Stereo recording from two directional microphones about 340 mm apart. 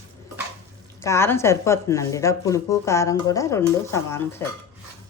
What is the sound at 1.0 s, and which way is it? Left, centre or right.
Speech, centre.